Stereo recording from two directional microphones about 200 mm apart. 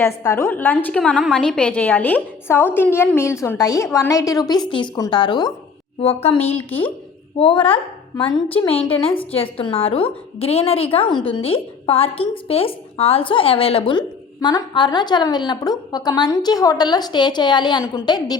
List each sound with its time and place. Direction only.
0.2 s a woman's voice: 15° left (ahead or behind); by 6.6 s 30° left (ahead or behind)
6.7 s a woman's voice: 10° left (ahead or behind)
7.3 s a woman's voice: 25° left (ahead or behind)
8.1 s a woman's voice: 15° left (ahead or behind)
8.4 s a woman's voice: 30° left (ahead or behind)